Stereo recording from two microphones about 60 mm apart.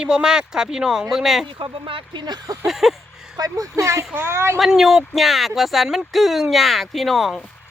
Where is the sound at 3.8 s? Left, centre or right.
Right.